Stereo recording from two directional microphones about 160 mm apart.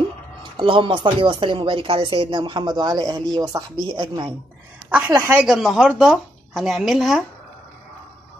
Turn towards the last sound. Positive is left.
turn(degrees=0)  # may be behind; listen again after turning